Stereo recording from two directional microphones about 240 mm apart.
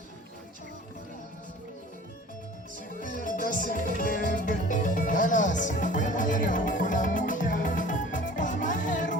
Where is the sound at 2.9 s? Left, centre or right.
Left.